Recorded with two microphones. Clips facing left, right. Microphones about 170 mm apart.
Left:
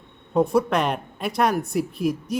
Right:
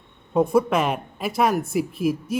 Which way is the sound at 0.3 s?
Centre (ahead or behind).